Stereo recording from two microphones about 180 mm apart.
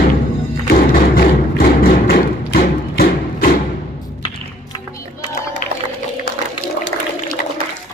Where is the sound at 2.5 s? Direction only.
55° left (ahead or behind).